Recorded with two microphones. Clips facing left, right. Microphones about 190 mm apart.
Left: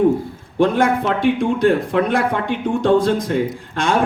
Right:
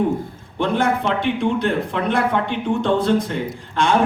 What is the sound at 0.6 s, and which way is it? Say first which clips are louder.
A man's voice: left 4 dB; 45° left (ahead or behind).